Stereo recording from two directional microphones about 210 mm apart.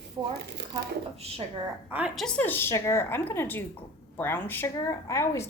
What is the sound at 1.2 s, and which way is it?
Speech, 30° right (ahead or behind).